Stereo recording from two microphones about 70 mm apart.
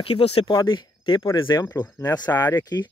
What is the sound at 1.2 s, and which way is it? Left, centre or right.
Speech, left.